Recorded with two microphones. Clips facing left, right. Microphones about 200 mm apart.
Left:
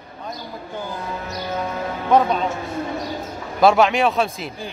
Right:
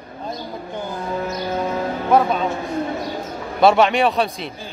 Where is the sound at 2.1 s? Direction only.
5° right (ahead or behind).